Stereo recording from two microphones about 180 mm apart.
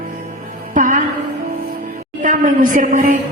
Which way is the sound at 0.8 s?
45° right (ahead or behind).